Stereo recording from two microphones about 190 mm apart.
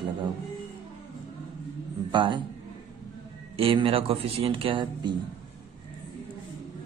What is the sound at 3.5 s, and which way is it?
Speech, 30° right (ahead or behind).